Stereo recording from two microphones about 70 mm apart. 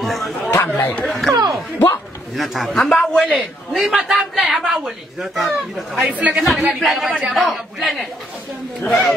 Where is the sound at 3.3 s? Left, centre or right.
Centre.